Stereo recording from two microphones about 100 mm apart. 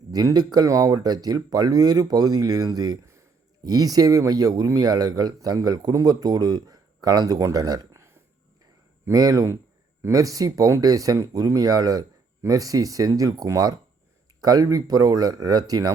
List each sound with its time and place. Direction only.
0.1 s speech: 40° right (ahead or behind)
9.1 s speech: 35° right (ahead or behind)